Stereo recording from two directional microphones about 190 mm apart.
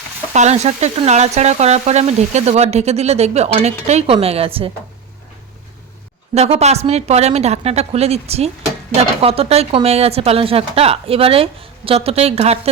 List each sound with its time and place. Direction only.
0.3 s speech: 35° right (ahead or behind)
6.3 s speech: 35° right (ahead or behind)